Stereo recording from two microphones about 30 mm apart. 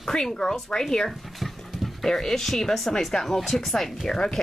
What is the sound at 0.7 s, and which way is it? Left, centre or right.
Speech, left.